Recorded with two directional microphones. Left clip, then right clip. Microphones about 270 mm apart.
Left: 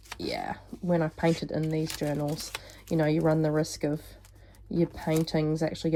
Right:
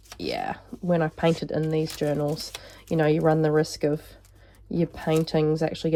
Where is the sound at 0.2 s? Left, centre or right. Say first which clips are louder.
Right 4 dB; centre.